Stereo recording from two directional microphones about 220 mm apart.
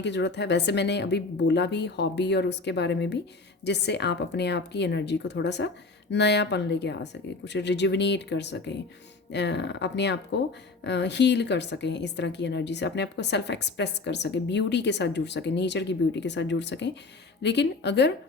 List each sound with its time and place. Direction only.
0.0 s a woman's voice: 50° left (ahead or behind)